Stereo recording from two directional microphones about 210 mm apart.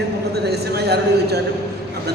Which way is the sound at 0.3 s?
50° right (ahead or behind).